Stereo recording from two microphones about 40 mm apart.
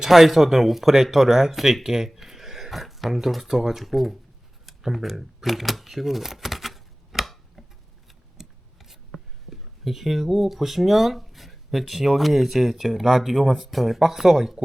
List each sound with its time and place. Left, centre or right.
0.1 s speech: centre
4.6 s a sound: centre
8.4 s scissors: centre
9.5 s speech: centre